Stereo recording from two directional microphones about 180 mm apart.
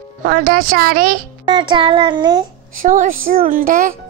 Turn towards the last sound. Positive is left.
turn(degrees=-50)  # may be behind; listen again after turning